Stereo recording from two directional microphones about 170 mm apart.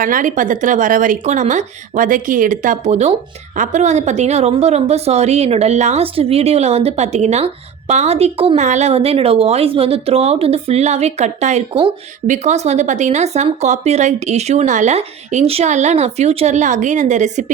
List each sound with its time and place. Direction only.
0.0 s a woman's voice: 50° right (ahead or behind); by 11.9 s 35° right (ahead or behind)
12.3 s speech: 45° right (ahead or behind)